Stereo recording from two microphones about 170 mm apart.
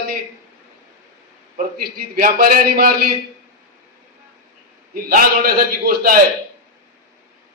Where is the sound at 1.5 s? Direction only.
55° right (ahead or behind).